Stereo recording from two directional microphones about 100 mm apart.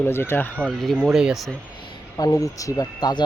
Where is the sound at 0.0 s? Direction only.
25° left (ahead or behind).